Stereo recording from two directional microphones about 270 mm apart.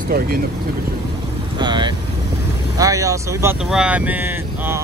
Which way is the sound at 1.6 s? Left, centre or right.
Centre.